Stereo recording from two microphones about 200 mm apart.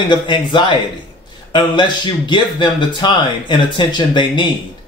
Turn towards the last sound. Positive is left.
turn(degrees=25)  # may be behind; listen again after turning